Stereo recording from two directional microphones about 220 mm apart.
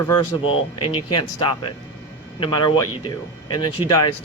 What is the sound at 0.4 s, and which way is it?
Speech, 25° left (ahead or behind).